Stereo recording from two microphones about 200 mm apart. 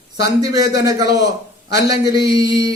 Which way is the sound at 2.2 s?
55° left (ahead or behind).